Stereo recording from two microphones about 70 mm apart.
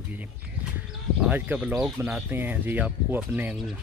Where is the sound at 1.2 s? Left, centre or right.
Right.